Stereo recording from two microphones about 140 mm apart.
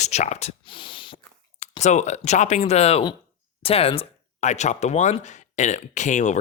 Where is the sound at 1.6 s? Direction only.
55° left (ahead or behind).